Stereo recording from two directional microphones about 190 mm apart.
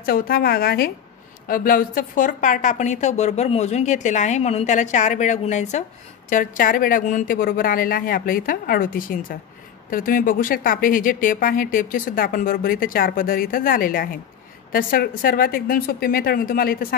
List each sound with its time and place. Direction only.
0.0 s a woman's voice: 50° left (ahead or behind)